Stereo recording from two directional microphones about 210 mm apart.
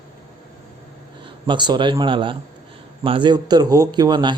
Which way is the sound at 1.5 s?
20° right (ahead or behind).